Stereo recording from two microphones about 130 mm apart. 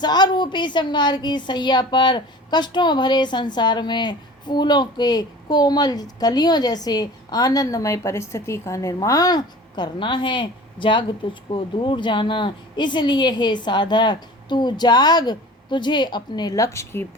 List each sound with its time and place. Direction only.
0.0 s a woman's voice: 35° left (ahead or behind)